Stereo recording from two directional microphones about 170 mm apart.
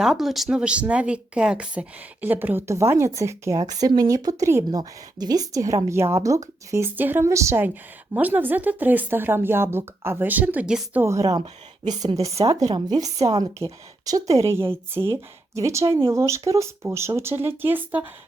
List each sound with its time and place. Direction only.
0.0 s a woman's voice: centre (ahead or behind)
11.0 s a woman's voice: 20° right (ahead or behind)